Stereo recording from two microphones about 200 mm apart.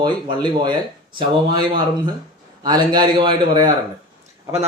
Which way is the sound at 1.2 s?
20° right (ahead or behind).